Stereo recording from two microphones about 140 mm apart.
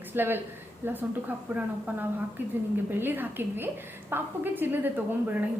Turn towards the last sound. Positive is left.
turn(degrees=-15)  # may be behind; listen again after turning